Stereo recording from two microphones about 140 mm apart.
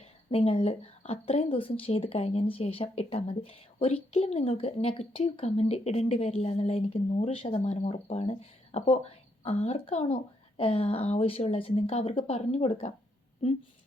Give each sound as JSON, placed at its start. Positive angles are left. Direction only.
{"t": 0.3, "sound": "speech", "side_deg": 45}